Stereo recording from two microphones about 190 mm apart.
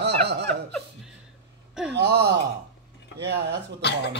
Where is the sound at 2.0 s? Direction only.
60° right (ahead or behind).